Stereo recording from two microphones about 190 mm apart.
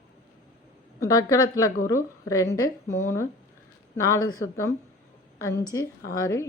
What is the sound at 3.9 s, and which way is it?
Speech, 20° left (ahead or behind).